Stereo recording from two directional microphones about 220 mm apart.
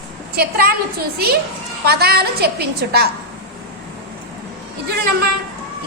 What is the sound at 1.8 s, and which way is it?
A woman's voice, 45° right (ahead or behind).